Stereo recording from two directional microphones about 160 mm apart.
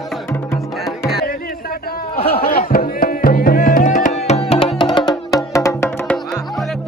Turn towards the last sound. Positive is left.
turn(degrees=15)  # may be behind; listen again after turning